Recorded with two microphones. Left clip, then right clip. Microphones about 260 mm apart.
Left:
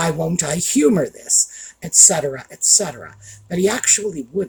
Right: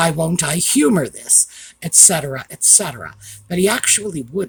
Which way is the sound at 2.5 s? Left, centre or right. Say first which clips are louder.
Right 1 dB; right.